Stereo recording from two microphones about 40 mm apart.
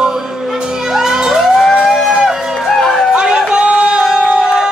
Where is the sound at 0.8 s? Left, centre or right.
Centre.